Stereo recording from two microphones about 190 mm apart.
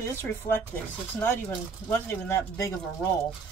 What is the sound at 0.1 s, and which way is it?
Speech, 10° left (ahead or behind).